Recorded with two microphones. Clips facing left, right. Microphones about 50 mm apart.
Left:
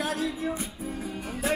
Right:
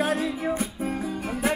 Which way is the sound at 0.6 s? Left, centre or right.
Right.